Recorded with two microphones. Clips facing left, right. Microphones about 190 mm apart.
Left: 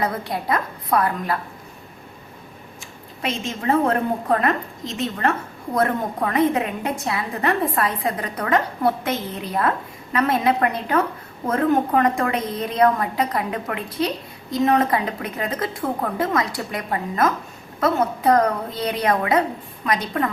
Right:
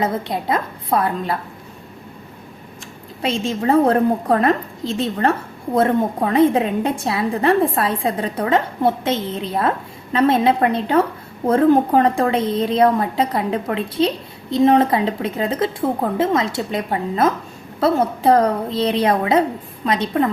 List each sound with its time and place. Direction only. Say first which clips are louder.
0.0 s a woman's voice: right 3 dB; 20° right (ahead or behind)
3.2 s a woman's voice: right 6 dB; 30° right (ahead or behind)